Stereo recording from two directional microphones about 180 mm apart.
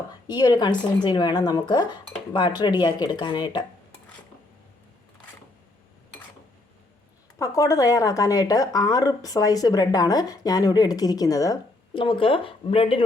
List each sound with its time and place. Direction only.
0.3 s speech: 25° left (ahead or behind)
7.3 s speech: 20° left (ahead or behind)